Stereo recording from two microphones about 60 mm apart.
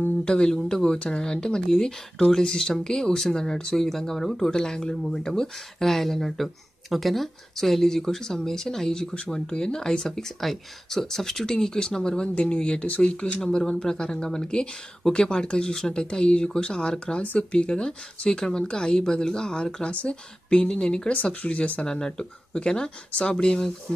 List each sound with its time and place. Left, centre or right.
0.0 s speech: centre